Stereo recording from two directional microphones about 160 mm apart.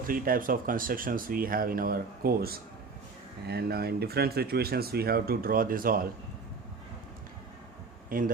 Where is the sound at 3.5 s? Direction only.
85° right; by 6.0 s 65° right (ahead or behind).